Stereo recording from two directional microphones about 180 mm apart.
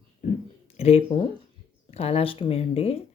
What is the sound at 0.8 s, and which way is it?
Speech, 35° left (ahead or behind).